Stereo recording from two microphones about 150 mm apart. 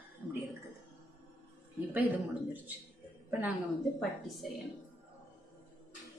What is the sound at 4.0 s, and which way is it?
Speech, centre (ahead or behind).